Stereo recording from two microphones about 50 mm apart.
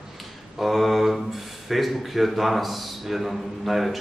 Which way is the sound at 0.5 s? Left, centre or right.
Centre.